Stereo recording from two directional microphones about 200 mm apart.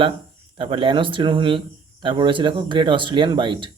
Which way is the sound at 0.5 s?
25° right (ahead or behind).